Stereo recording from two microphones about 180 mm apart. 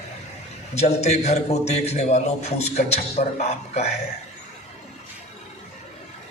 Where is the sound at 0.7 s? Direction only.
35° left (ahead or behind).